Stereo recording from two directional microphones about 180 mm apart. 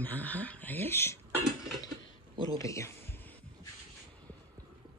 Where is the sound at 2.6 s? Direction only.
15° left (ahead or behind).